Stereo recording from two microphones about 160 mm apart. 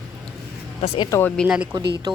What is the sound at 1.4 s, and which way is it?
Speech, 5° right (ahead or behind).